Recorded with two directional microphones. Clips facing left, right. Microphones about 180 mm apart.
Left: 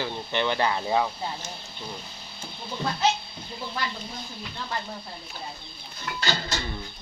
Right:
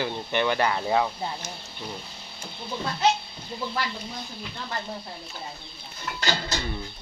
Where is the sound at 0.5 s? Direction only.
20° left (ahead or behind).